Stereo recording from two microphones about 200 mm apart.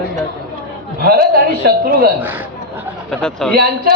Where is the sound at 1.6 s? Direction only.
45° right (ahead or behind).